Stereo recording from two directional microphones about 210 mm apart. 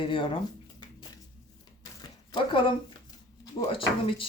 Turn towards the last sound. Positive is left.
turn(degrees=25)  # may be behind; listen again after turning